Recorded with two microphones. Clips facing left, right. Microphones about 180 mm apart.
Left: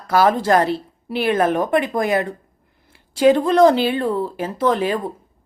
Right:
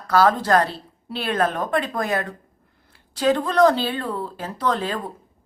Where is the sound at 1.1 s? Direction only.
10° left (ahead or behind).